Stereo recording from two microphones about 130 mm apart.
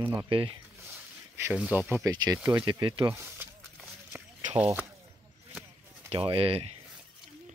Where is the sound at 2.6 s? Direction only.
35° right (ahead or behind).